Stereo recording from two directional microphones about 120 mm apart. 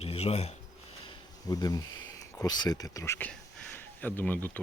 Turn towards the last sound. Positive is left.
turn(degrees=15)  # may be behind; listen again after turning